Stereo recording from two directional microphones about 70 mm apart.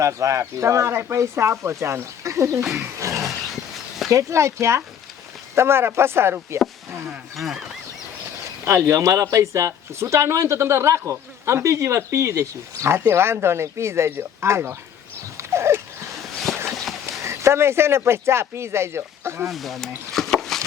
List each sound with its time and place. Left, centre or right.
0.0 s speech: right
3.2 s dog: centre
4.1 s speech: right
5.5 s speech: right
7.1 s speech: centre
8.6 s speech: right
15.4 s dog: right
16.1 s a sound: centre
17.1 s speech: right
19.5 s speech: centre
20.1 s chopping: centre